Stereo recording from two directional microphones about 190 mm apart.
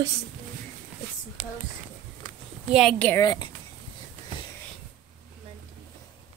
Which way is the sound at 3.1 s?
20° left (ahead or behind).